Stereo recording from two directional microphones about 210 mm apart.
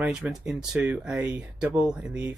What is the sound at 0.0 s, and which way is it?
Speech, 5° right (ahead or behind).